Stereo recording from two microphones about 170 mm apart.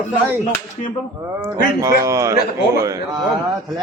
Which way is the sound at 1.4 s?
20° right (ahead or behind).